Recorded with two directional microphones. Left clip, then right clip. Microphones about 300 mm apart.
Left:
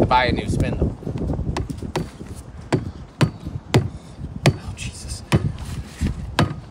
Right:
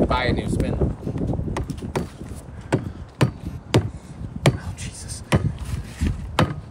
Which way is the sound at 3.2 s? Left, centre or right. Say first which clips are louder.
Left 1 dB; centre.